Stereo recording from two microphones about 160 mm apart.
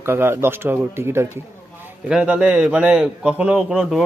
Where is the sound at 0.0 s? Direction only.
15° right (ahead or behind).